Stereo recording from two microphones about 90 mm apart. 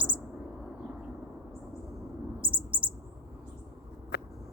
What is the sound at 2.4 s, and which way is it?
Bird, 70° right (ahead or behind).